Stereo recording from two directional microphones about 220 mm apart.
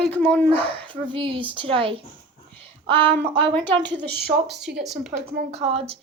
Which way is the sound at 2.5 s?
25° right (ahead or behind).